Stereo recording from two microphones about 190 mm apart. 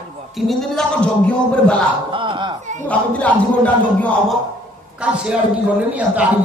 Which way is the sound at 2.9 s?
5° left (ahead or behind).